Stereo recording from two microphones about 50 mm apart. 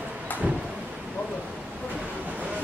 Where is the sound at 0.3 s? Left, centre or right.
Left.